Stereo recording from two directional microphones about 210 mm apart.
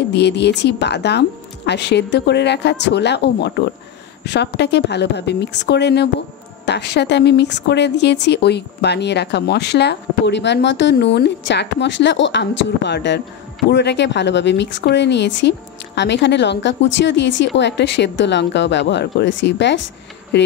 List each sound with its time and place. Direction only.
0.1 s speech: 55° left (ahead or behind)